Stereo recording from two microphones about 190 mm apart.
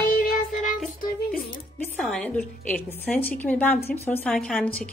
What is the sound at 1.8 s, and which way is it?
A woman's voice, 5° left (ahead or behind).